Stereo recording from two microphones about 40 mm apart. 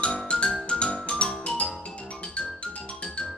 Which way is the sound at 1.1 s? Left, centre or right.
Left.